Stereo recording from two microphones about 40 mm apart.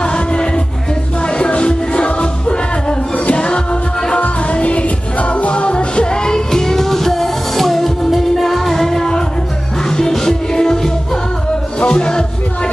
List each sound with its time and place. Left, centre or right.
0.0 s music: left
4.2 s music: left